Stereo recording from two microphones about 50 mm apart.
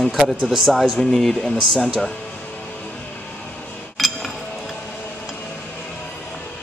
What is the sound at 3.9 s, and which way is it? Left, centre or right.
Chink, centre.